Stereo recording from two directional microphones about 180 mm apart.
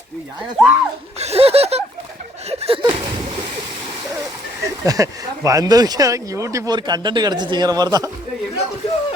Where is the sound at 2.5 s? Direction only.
35° right (ahead or behind).